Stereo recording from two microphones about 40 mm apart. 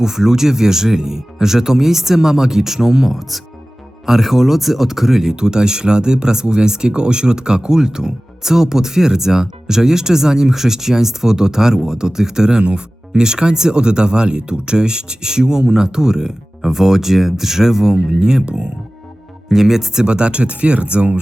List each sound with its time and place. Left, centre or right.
0.0 s speech: centre
19.5 s speech: centre; by 21.2 s right